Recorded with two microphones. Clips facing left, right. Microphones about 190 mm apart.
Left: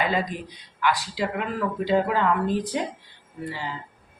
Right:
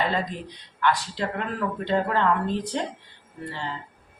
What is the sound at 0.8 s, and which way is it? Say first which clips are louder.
Speech: even; 5° left (ahead or behind).